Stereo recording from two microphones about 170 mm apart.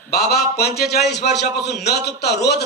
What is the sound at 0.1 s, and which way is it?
Speech, 70° left (ahead or behind).